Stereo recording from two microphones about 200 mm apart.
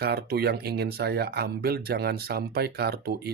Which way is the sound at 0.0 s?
55° right (ahead or behind).